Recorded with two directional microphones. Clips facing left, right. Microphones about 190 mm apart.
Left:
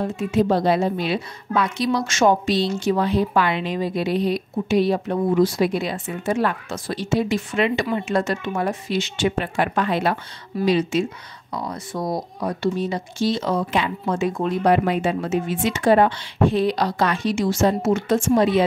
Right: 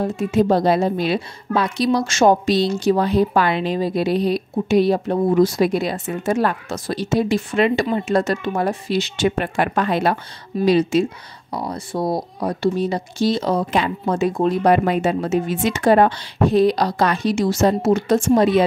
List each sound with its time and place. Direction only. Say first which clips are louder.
0.0 s a woman's voice: right 2 dB; 40° right (ahead or behind)